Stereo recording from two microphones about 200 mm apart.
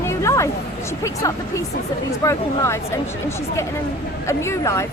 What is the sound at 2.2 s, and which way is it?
Speech, 15° left (ahead or behind).